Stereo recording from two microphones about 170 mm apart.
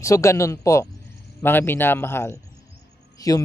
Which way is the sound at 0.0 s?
20° left (ahead or behind).